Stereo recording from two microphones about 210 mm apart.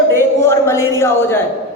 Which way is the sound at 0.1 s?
10° left (ahead or behind).